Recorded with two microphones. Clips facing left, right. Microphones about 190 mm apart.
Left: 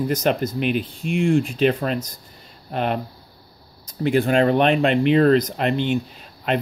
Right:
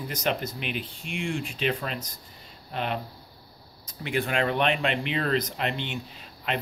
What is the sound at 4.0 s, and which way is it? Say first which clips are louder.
Speech: left 9 dB; 40° left (ahead or behind).